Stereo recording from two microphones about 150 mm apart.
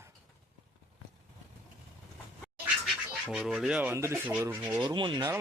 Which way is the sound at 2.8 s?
Centre (ahead or behind).